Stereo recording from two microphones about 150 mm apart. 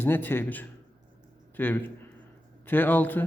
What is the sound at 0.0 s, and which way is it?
A man's voice, 15° left (ahead or behind).